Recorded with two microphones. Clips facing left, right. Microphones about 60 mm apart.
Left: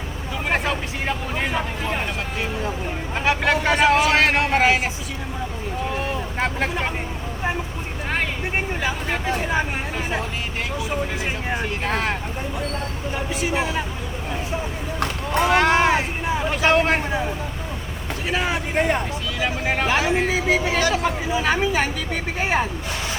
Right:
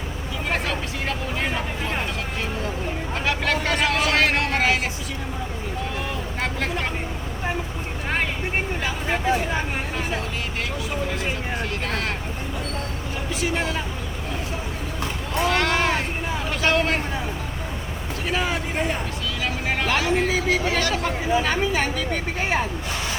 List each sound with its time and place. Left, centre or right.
0.5 s vehicle: centre
1.5 s a sound: centre
3.2 s a sound: centre
6.4 s speech: centre
9.0 s speech: centre
11.5 s speech: left
13.4 s speech: centre
15.4 s vehicle: centre
16.7 s speech: left
18.3 s speech: centre
18.8 s speech: left
19.4 s speech: centre